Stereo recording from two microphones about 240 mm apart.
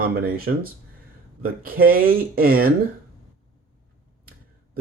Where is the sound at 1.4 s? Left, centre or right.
Right.